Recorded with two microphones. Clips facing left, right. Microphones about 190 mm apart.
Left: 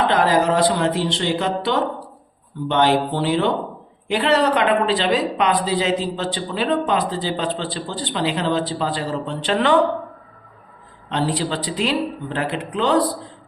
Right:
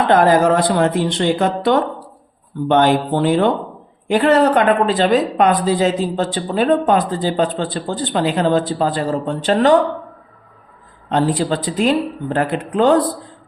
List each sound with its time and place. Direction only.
0.1 s speech: 50° right (ahead or behind)
11.1 s speech: 50° right (ahead or behind)